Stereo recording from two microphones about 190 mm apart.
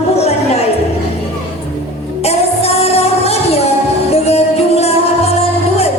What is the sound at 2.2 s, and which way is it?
Music, 35° left (ahead or behind).